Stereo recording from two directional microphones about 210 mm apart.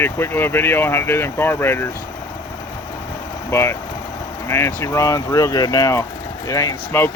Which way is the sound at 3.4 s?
10° left (ahead or behind).